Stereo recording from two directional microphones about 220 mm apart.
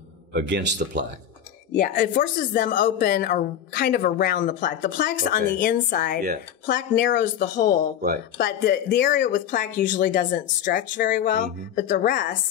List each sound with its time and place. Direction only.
0.3 s a man's voice: 50° right (ahead or behind)
1.8 s speech: 40° left (ahead or behind)